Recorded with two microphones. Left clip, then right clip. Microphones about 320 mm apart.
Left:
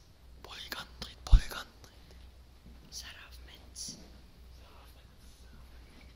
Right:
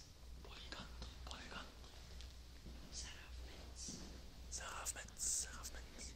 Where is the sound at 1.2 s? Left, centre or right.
Left.